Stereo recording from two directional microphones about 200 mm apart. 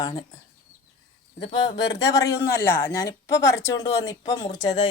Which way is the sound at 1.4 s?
25° left (ahead or behind).